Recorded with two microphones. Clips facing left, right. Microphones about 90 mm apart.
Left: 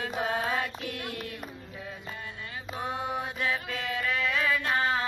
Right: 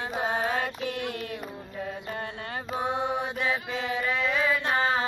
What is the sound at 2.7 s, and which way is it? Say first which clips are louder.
Mantra: right 4 dB; 25° right (ahead or behind).